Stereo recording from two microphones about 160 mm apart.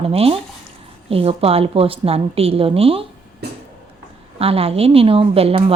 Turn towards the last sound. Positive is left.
turn(degrees=-35)  # may be behind; listen again after turning